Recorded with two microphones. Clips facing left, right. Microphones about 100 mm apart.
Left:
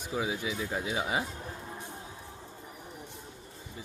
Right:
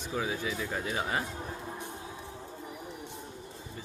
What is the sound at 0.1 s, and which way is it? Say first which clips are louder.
A man's voice: even; 10° left (ahead or behind).